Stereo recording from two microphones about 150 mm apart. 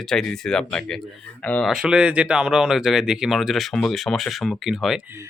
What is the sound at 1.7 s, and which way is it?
Speech, 5° right (ahead or behind).